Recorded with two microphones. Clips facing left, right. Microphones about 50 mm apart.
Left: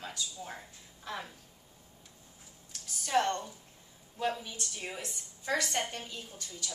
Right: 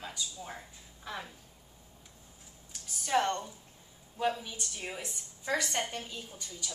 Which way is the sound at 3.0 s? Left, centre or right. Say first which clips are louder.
Even; centre.